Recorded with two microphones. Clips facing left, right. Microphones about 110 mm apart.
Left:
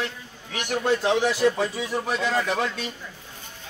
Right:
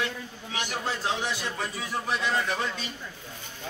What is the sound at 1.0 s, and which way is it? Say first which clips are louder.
Speech: left 8 dB; 75° left (ahead or behind).